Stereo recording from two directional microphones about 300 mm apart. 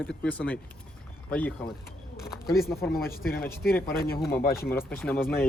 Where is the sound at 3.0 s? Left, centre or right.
Left.